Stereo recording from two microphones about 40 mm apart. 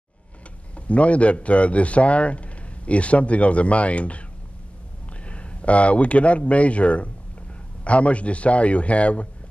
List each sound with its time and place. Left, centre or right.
0.7 s a man's voice: left
5.2 s a man's voice: left